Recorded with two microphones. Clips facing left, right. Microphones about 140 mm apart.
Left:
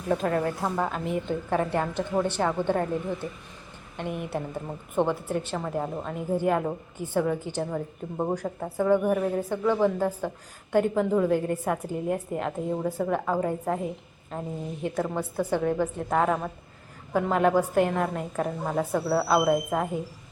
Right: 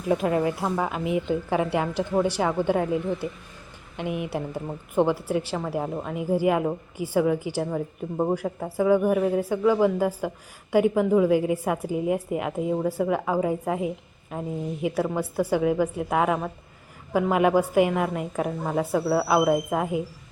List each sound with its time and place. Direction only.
0.1 s a woman's voice: 5° right (ahead or behind)